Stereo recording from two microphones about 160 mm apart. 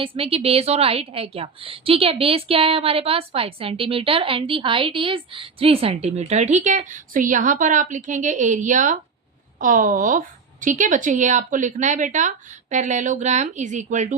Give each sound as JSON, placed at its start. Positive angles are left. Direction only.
{"t": 0.0, "sound": "a woman's voice", "side_deg": -35}